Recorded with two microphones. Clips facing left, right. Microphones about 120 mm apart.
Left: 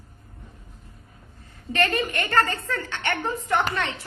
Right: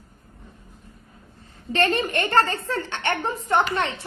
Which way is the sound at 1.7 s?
30° right (ahead or behind).